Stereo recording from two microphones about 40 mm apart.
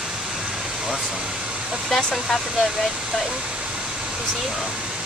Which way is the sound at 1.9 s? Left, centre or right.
Centre.